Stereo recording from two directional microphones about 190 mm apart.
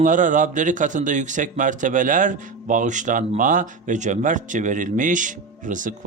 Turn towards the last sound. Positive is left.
turn(degrees=-45)  # may be behind; listen again after turning